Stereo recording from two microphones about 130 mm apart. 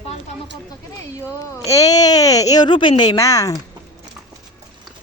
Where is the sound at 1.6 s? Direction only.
25° left (ahead or behind).